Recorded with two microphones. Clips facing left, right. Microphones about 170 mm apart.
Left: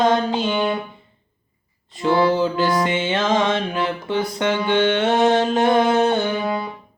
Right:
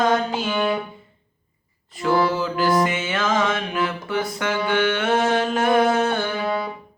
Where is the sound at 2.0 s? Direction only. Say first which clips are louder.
Left 3 dB; 25° left (ahead or behind).